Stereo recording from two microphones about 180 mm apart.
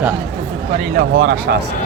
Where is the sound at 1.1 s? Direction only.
65° right (ahead or behind).